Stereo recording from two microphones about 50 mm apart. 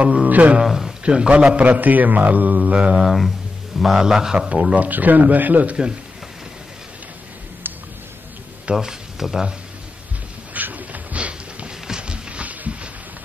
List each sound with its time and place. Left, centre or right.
0.0 s speech: right
0.7 s speech: centre
1.0 s a man's voice: right
1.7 s a man's voice: right
3.0 s speech: centre
4.7 s a man's voice: right
7.7 s a sound: right
8.7 s speech: centre
10.5 s a sound: right